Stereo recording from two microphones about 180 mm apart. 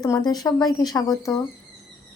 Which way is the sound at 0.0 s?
20° left (ahead or behind).